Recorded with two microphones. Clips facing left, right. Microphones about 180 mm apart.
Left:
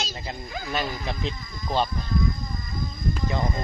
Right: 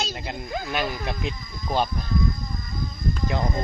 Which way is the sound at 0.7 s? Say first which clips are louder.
Even; 10° right (ahead or behind).